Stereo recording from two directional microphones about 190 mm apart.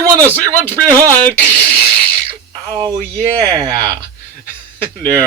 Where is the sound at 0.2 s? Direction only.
10° left (ahead or behind).